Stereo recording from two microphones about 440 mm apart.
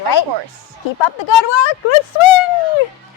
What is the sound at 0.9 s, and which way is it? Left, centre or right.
Speech, left.